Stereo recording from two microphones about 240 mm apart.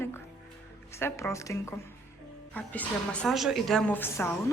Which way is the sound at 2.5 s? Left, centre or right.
Centre.